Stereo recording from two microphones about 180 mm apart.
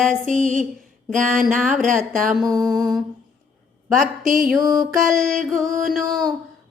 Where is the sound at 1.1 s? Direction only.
45° right (ahead or behind).